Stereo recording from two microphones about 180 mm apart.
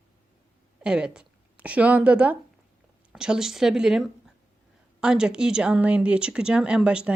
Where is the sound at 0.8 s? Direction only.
5° right (ahead or behind).